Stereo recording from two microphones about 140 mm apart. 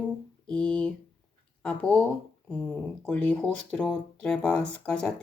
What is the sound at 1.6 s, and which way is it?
Speech, 5° left (ahead or behind).